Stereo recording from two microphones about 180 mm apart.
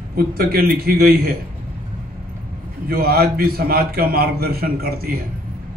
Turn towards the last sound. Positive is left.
turn(degrees=-55)  # may be behind; listen again after turning